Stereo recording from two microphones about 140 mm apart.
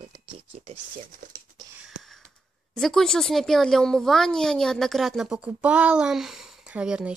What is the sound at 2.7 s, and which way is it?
Speech, 5° left (ahead or behind).